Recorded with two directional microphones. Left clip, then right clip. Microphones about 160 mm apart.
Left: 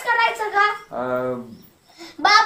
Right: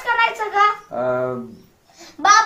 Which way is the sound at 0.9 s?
60° right (ahead or behind).